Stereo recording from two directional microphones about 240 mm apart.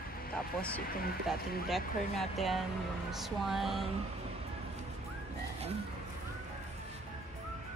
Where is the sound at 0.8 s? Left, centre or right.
Left.